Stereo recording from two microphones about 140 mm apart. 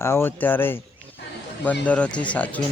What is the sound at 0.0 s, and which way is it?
Speech, 15° left (ahead or behind).